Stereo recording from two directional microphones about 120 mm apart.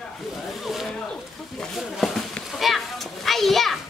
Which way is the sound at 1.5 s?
Centre (ahead or behind).